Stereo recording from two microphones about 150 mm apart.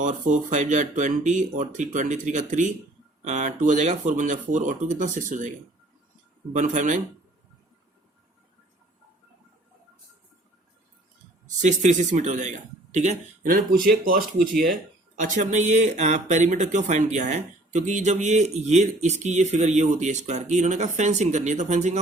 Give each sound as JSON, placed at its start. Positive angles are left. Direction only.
{"t": 0.0, "sound": "speech", "side_deg": -55}
{"t": 6.5, "sound": "speech", "side_deg": -55}
{"t": 11.6, "sound": "speech", "side_deg": -55}
{"t": 14.0, "sound": "speech", "side_deg": -70}
{"t": 15.2, "sound": "speech", "side_deg": -55}